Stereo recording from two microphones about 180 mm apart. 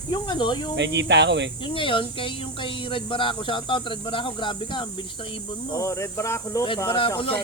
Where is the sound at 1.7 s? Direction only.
30° left (ahead or behind).